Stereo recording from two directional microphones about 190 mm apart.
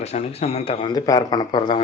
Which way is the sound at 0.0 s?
35° left (ahead or behind).